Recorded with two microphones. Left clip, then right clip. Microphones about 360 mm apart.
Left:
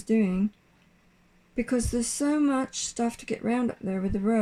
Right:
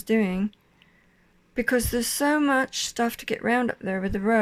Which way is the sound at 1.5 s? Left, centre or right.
Right.